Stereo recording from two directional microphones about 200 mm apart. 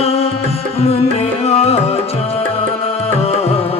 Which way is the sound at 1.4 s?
30° left (ahead or behind).